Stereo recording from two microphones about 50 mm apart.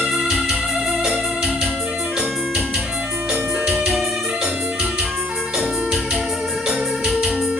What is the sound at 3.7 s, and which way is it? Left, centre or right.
Music, centre.